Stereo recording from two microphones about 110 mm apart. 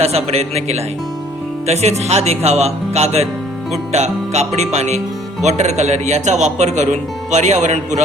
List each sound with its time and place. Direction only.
0.3 s speech: 70° right (ahead or behind); by 8.0 s 90° right